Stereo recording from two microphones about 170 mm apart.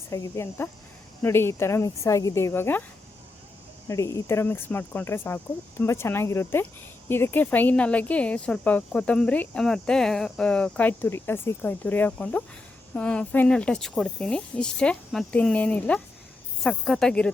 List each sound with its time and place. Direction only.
0.1 s speech: 20° left (ahead or behind)
3.8 s speech: 20° left (ahead or behind)